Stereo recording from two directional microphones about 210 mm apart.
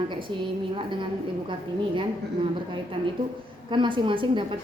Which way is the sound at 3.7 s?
25° right (ahead or behind).